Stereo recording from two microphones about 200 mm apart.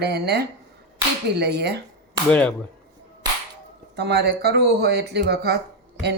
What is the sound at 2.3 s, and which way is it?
Speech, 5° left (ahead or behind).